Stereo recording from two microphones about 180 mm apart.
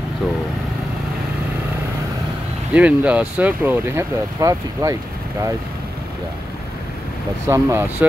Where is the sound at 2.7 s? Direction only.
5° right (ahead or behind).